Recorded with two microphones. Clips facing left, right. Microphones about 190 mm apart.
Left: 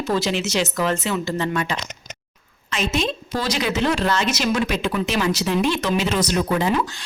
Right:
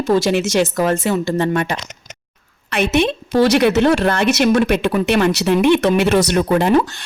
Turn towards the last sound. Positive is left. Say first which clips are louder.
# right 6 dB
turn(degrees=-60)  # may be behind; listen again after turning